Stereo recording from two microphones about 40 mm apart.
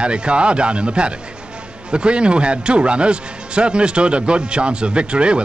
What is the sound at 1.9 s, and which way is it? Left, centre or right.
A man's voice, right.